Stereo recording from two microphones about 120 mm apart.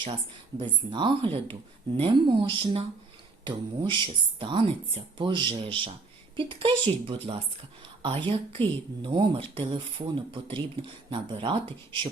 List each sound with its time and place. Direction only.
0.6 s speech: 40° right (ahead or behind)